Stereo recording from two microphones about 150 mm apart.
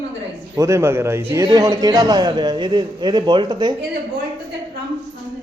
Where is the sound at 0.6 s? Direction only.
20° right (ahead or behind).